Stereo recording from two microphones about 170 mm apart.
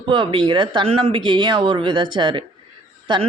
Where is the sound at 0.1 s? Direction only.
30° right (ahead or behind).